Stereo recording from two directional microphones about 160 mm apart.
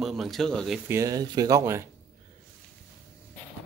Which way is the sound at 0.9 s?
20° right (ahead or behind).